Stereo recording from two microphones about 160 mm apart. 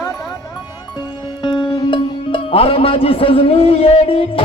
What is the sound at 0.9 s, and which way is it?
Music, 25° left (ahead or behind).